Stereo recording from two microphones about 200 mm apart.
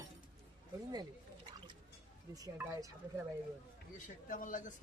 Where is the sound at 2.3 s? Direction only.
15° right (ahead or behind).